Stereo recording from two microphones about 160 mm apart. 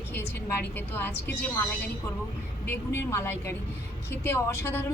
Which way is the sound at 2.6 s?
15° left (ahead or behind).